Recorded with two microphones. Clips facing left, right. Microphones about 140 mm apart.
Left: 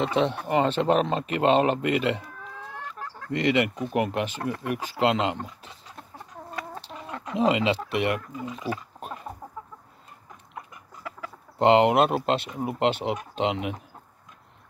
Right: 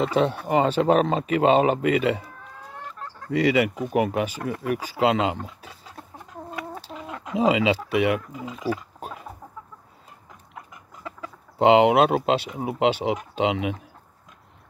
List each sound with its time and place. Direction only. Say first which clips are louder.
0.0 s speech: right 2 dB; 5° right (ahead or behind)
6.1 s chicken: right 2 dB; 10° right (ahead or behind)
8.4 s a sound: right 3 dB; centre (ahead or behind)
11.1 s chicken: right 1 dB; 20° right (ahead or behind)
11.5 s speech: right 2 dB; 5° right (ahead or behind)